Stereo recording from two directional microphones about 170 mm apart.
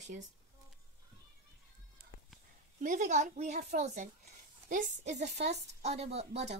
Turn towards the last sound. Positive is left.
turn(degrees=-40)  # may be behind; listen again after turning